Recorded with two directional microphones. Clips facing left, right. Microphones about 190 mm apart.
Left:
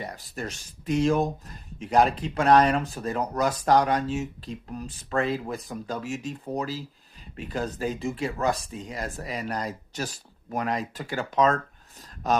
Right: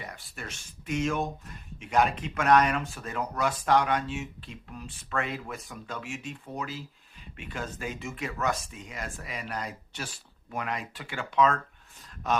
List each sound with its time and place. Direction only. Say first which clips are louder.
0.0 s speech: left 7 dB; 40° left (ahead or behind)